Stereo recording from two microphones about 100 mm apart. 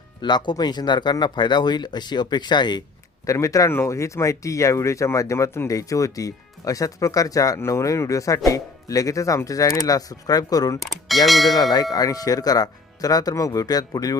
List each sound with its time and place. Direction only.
0.2 s speech: 50° left (ahead or behind)
3.2 s speech: 30° left (ahead or behind)
10.8 s speech: centre (ahead or behind)
11.5 s speech: 40° left (ahead or behind)